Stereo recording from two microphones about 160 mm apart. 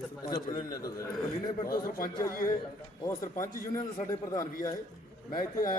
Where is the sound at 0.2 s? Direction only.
25° left (ahead or behind).